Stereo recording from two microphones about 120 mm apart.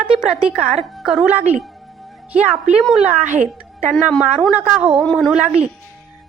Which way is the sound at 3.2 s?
90° right.